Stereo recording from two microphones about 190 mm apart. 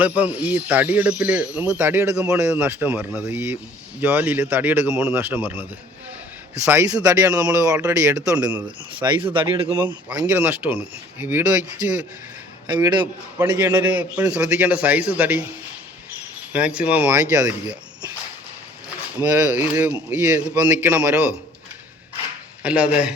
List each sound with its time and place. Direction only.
0.2 s speech: 10° right (ahead or behind)
6.7 s speech: 15° right (ahead or behind)
8.4 s speech: 10° right (ahead or behind)
9.0 s speech: 25° right (ahead or behind)
10.1 s speech: 5° right (ahead or behind)
12.6 s speech: 20° right (ahead or behind)
13.6 s speech: 10° right (ahead or behind)
16.5 s speech: 5° right (ahead or behind)
19.1 s speech: 5° right (ahead or behind)
22.6 s speech: 5° right (ahead or behind)